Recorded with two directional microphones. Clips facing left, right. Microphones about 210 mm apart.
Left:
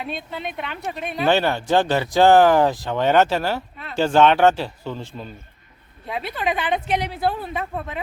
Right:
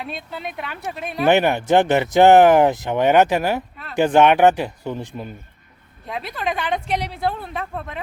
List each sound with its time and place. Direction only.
0.0 s speech: centre (ahead or behind)
1.3 s speech: 15° right (ahead or behind)
6.1 s speech: centre (ahead or behind)